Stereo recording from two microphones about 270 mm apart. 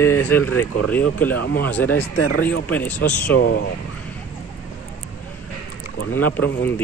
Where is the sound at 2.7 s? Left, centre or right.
Centre.